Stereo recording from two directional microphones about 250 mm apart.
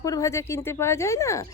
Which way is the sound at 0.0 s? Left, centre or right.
Centre.